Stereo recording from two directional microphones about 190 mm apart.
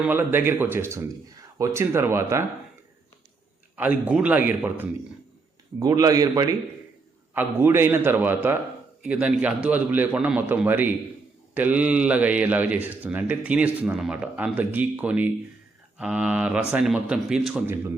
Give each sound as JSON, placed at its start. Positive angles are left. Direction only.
{"t": 0.0, "sound": "speech", "side_deg": -10}
{"t": 3.8, "sound": "a man's voice", "side_deg": -5}